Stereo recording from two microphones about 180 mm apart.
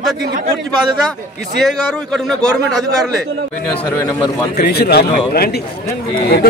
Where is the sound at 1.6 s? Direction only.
Centre (ahead or behind).